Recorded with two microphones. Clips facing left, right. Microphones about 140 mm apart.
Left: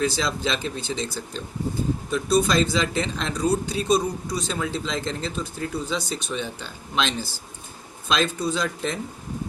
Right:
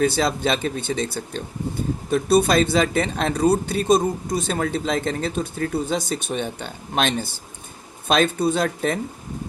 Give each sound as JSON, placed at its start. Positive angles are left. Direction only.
{"t": 0.0, "sound": "a man's voice", "side_deg": -55}